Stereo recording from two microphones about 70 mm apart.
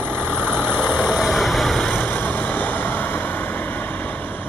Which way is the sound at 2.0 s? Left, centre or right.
Left.